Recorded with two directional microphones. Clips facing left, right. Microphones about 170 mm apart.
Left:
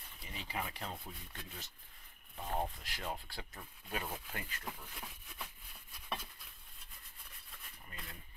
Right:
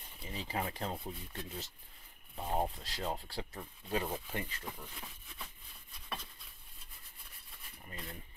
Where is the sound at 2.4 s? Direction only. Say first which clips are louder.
Right 4 dB; 30° right (ahead or behind).